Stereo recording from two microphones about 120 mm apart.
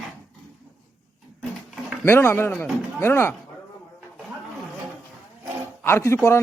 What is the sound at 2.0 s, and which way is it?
A man's voice, 20° left (ahead or behind).